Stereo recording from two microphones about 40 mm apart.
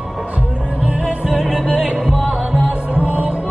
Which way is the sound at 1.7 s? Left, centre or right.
Right.